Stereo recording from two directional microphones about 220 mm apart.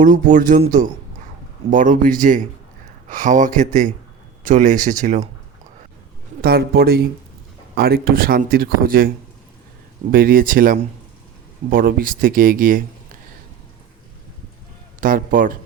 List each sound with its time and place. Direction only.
0.0 s speech: 35° right (ahead or behind)
6.4 s speech: 45° right (ahead or behind)
10.1 s speech: 40° right (ahead or behind)
15.0 s speech: 40° right (ahead or behind)